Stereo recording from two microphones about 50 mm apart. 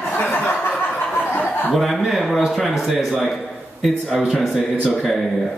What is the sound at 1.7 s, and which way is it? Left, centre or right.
A man's voice, centre.